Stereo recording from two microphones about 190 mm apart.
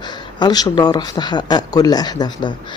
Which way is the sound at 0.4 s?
20° left (ahead or behind).